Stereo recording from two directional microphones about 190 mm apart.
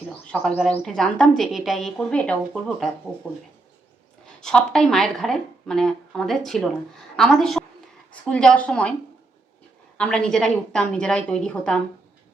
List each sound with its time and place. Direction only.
0.3 s a woman's voice: centre (ahead or behind)
10.0 s a woman's voice: 5° left (ahead or behind)